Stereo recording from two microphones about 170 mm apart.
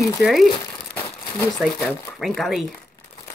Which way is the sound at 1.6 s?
Centre (ahead or behind).